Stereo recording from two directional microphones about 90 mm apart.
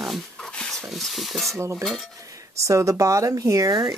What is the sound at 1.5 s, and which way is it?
Speech, 30° right (ahead or behind).